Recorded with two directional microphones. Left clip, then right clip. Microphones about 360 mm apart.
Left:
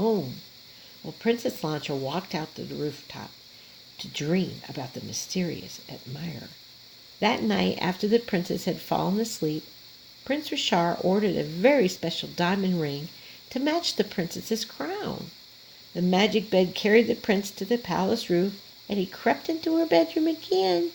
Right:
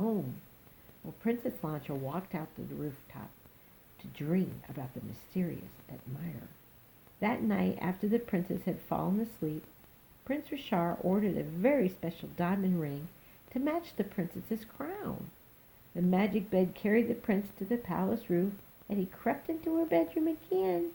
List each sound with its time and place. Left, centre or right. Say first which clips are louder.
1.0 s speech: left 9 dB; left
3.9 s speech: left 8 dB; left
7.2 s speech: left 8 dB; left